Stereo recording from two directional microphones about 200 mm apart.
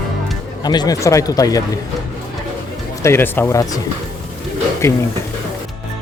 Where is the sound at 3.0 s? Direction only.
10° left (ahead or behind).